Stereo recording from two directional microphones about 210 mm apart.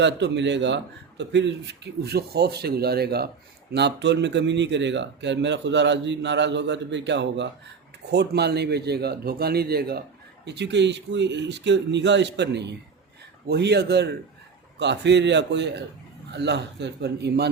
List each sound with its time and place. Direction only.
0.0 s speech: 55° right (ahead or behind)